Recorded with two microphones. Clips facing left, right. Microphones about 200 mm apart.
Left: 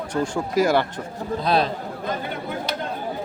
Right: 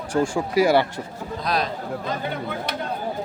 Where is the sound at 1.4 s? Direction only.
30° left (ahead or behind).